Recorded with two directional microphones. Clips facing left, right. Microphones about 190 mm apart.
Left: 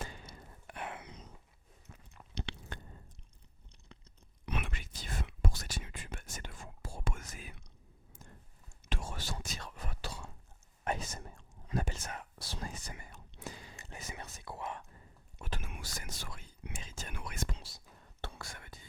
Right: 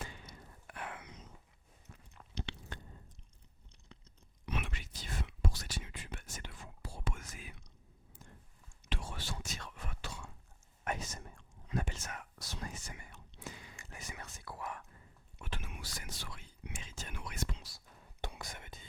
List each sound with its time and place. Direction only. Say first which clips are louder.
0.0 s a sound: left 3 dB; 40° left (ahead or behind)
0.3 s a sound: left 2 dB; 25° left (ahead or behind)
2.3 s chewing: left 1 dB; 75° left (ahead or behind)
4.4 s whispering: left 1 dB; 60° left (ahead or behind); by 7.5 s 40° left (ahead or behind)
8.9 s whispering: left 2 dB; 45° left (ahead or behind); by 14.8 s 25° left (ahead or behind)
15.4 s whispering: left 2 dB; 40° left (ahead or behind)
17.6 s whispering: left 3 dB; 25° left (ahead or behind)
18.2 s whispering: right 1 dB; 15° right (ahead or behind)